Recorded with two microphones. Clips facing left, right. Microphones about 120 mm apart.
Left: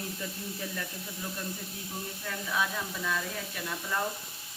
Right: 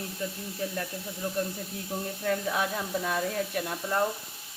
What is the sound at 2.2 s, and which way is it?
Speech, 50° right (ahead or behind).